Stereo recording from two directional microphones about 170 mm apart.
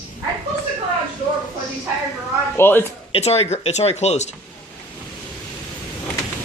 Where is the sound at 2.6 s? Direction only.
10° left (ahead or behind).